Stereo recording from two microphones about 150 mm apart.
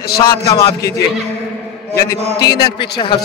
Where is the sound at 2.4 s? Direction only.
90° left.